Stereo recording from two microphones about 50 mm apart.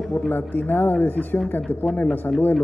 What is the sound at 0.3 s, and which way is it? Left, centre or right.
A woman's voice, left.